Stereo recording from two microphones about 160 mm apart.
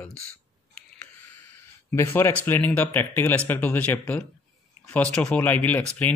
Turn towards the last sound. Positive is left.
turn(degrees=10)  # may be behind; listen again after turning